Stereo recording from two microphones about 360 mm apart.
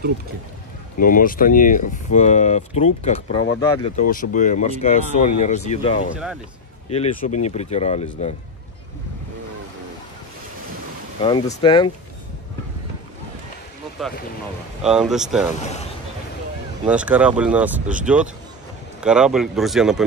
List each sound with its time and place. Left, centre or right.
0.9 s speech: left
11.2 s speech: centre
14.8 s speech: centre
16.8 s speech: centre
18.9 s speech: centre